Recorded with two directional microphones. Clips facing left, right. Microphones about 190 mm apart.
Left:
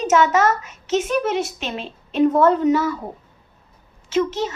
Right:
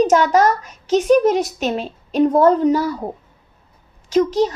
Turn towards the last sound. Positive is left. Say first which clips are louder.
# right 5 dB
turn(degrees=-35)  # may be behind; listen again after turning